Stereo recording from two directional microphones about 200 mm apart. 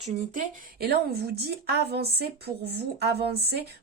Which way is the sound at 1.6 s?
50° right (ahead or behind).